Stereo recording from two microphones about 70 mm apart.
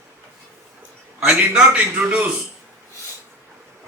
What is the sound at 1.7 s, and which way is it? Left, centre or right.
Speech, centre.